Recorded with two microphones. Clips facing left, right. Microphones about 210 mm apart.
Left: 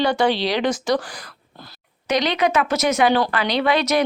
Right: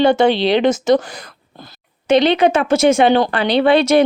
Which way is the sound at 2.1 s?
30° right (ahead or behind).